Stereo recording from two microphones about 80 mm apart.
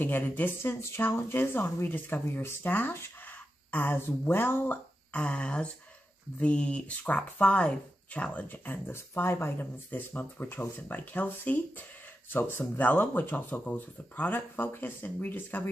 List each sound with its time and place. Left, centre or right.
0.0 s speech: left
5.1 s speech: centre